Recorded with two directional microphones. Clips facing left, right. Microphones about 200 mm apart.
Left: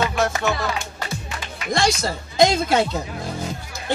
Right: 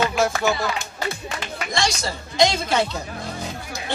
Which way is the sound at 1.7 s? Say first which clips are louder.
Left 5 dB; 55° left (ahead or behind).